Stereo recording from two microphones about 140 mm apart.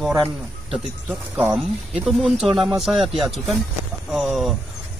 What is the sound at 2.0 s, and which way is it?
Speech, centre (ahead or behind).